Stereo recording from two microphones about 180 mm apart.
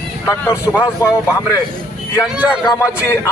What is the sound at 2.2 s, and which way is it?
Speech, 5° right (ahead or behind).